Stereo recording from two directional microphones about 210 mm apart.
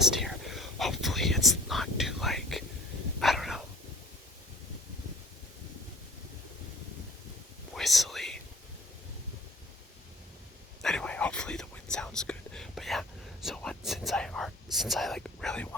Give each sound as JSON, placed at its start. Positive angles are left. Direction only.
{"t": 0.2, "sound": "whispering", "side_deg": 0}
{"t": 3.2, "sound": "dog", "side_deg": 0}
{"t": 7.7, "sound": "whispering", "side_deg": 0}
{"t": 10.8, "sound": "whispering", "side_deg": 5}